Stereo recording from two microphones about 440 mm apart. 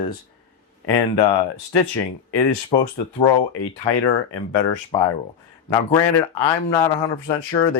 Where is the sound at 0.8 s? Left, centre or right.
Left.